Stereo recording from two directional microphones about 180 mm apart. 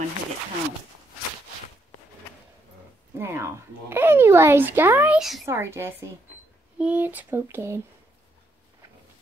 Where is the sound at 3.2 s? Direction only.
15° right (ahead or behind).